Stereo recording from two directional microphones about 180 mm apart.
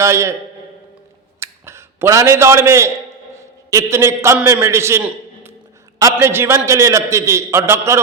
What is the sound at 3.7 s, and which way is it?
A man's voice, 15° right (ahead or behind).